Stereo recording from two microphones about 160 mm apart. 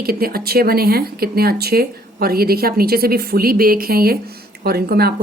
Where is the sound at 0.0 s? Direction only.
70° right (ahead or behind).